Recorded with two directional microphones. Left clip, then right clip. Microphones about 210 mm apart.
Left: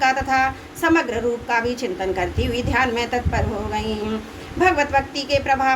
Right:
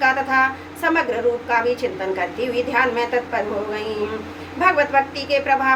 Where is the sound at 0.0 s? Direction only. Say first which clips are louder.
Right 1 dB; 50° left (ahead or behind).